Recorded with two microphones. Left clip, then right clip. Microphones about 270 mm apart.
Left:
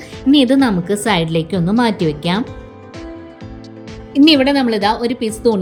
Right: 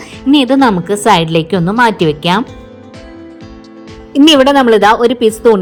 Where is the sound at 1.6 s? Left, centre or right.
Right.